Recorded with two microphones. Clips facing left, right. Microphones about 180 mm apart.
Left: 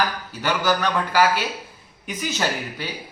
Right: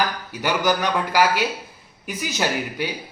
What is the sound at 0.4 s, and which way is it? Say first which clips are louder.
A man's voice: right 1 dB; 15° right (ahead or behind).